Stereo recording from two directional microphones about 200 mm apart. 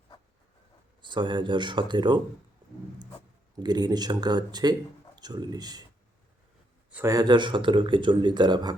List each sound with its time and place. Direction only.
1.0 s speech: 25° right (ahead or behind)
3.6 s speech: 20° right (ahead or behind)
6.9 s speech: 15° right (ahead or behind)